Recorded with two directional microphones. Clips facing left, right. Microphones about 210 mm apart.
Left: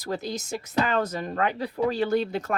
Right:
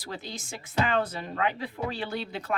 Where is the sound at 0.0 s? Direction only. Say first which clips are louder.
Left 8 dB; 40° left (ahead or behind).